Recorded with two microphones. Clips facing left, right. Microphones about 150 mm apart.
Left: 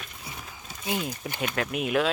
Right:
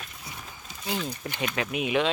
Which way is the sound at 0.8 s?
15° left (ahead or behind).